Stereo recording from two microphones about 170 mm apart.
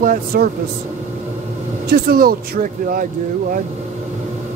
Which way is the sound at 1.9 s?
60° right (ahead or behind).